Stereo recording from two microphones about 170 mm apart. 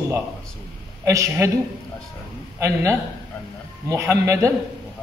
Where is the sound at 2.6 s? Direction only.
15° right (ahead or behind).